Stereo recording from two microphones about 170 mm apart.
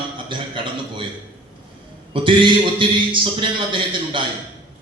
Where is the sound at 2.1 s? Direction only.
30° right (ahead or behind).